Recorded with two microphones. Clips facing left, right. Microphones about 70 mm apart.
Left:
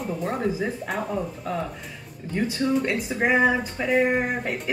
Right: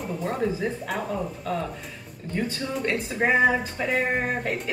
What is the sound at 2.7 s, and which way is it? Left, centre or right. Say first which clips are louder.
A woman's voice: left 3 dB; centre.